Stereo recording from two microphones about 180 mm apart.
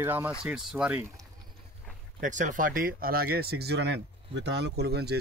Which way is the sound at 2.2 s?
45° right (ahead or behind).